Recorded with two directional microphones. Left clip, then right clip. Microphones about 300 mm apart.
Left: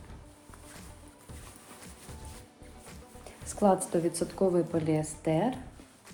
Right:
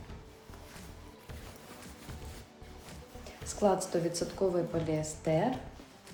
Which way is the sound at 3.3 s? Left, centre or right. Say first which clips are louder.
Left 3 dB; centre.